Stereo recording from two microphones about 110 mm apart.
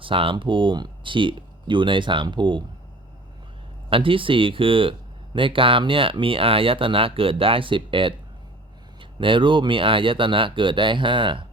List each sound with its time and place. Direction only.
0.0 s speech: 50° right (ahead or behind)
3.8 s speech: 55° right (ahead or behind)